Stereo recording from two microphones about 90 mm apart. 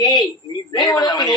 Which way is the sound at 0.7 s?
50° left (ahead or behind).